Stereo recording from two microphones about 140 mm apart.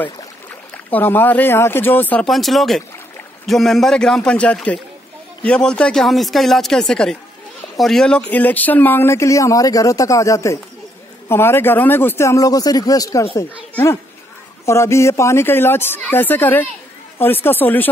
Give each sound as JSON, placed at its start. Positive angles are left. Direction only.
{"t": 0.8, "sound": "speech", "side_deg": 15}
{"t": 2.2, "sound": "speech", "side_deg": 0}
{"t": 14.7, "sound": "speech", "side_deg": 20}